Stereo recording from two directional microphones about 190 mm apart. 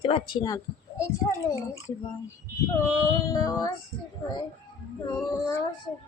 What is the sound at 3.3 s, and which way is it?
Speech, 20° left (ahead or behind).